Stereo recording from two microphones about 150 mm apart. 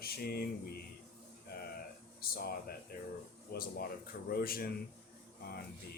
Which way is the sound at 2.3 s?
90° left.